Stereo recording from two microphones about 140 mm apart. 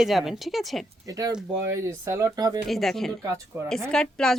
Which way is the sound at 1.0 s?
25° right (ahead or behind).